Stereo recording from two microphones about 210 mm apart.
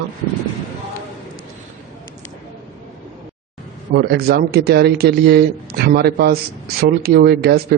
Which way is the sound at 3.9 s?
50° right (ahead or behind).